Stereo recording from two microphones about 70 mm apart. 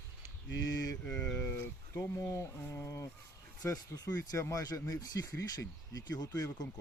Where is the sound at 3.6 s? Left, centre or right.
Left.